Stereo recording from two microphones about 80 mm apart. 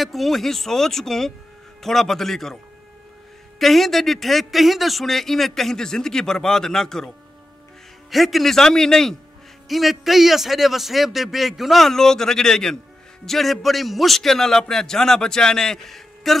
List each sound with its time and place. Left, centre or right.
0.0 s a man's voice: centre
8.1 s a man's voice: centre